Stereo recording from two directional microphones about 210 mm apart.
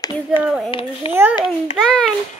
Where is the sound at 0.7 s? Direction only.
25° left (ahead or behind).